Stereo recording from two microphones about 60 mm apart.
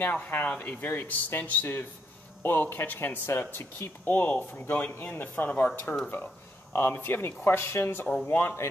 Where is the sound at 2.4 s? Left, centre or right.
Left.